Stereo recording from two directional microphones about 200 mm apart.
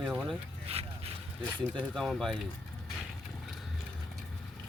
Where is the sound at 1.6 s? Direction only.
5° left (ahead or behind).